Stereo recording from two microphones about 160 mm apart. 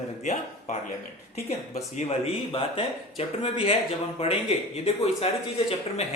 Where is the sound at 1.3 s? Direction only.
40° left (ahead or behind).